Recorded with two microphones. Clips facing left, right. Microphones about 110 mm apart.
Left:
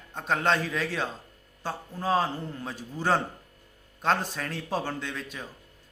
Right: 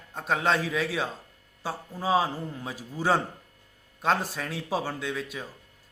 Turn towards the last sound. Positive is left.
turn(degrees=-5)  # may be behind; listen again after turning